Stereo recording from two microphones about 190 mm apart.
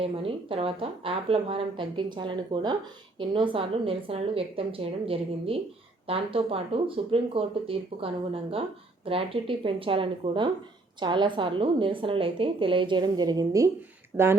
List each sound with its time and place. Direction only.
0.0 s a woman's voice: 30° right (ahead or behind)
14.1 s speech: 5° right (ahead or behind)